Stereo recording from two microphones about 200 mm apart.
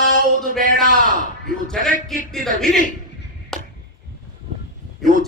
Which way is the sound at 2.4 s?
Centre (ahead or behind).